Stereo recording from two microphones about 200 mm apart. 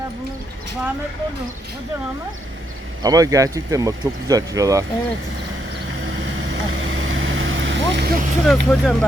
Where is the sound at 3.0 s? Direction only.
20° right (ahead or behind).